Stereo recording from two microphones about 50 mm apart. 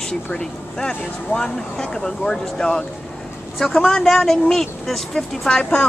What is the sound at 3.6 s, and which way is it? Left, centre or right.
Speech, centre.